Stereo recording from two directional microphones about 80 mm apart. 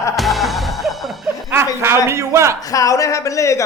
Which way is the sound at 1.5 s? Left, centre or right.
Right.